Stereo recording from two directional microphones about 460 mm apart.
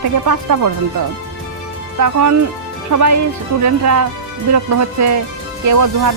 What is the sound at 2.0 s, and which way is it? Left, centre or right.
Speech, right.